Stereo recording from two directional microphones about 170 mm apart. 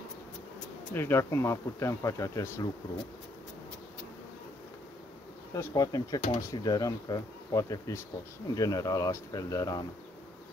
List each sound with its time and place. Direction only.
0.9 s speech: 15° left (ahead or behind)
5.5 s speech: 20° left (ahead or behind)